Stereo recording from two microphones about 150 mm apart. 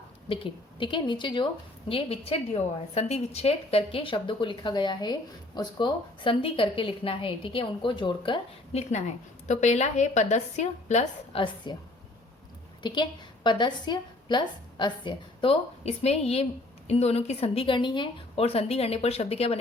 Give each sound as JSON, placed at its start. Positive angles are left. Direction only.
{"t": 0.3, "sound": "a woman's voice", "side_deg": 35}
{"t": 8.9, "sound": "a woman's voice", "side_deg": 50}
{"t": 11.3, "sound": "a woman's voice", "side_deg": 30}
{"t": 12.8, "sound": "a woman's voice", "side_deg": 30}